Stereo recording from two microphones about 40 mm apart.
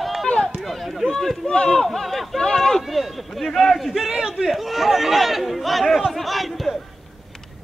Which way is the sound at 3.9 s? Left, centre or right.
Centre.